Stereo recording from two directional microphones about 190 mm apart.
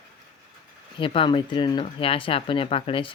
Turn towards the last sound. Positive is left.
turn(degrees=30)  # may be behind; listen again after turning